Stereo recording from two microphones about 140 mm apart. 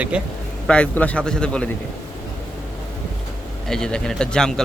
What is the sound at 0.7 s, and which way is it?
A man's voice, 10° left (ahead or behind).